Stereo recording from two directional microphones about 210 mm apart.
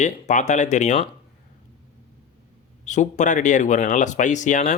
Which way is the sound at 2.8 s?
35° left (ahead or behind).